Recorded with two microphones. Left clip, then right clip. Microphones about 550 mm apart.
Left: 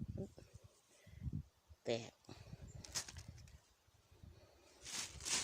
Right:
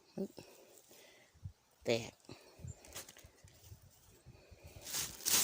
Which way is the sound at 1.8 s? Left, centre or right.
Left.